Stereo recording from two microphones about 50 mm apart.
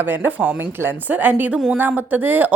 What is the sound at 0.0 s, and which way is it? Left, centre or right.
A woman's voice, right.